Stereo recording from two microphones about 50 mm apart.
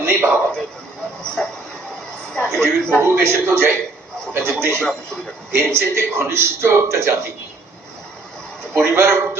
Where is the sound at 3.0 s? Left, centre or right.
Right.